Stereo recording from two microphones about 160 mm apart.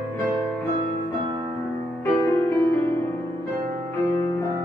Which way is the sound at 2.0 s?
15° left (ahead or behind).